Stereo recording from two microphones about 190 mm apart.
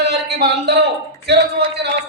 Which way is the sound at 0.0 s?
60° right (ahead or behind).